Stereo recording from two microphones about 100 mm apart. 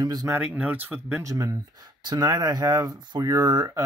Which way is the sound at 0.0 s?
40° right (ahead or behind).